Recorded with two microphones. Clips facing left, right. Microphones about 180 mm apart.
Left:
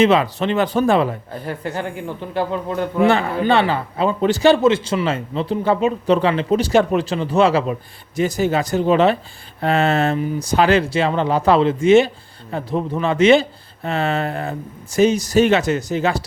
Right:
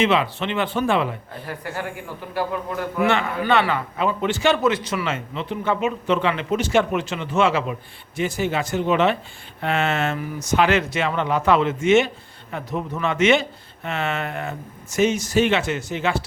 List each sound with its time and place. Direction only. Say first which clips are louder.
0.0 s a man's voice: left 5 dB; 40° left (ahead or behind)
1.6 s a man's voice: left 4 dB; 25° left (ahead or behind)